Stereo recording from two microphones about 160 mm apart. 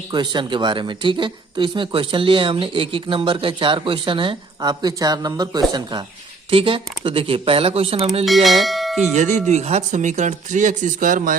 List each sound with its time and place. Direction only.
0.1 s speech: 30° right (ahead or behind)
8.2 s speech: centre (ahead or behind)
9.1 s speech: 50° right (ahead or behind)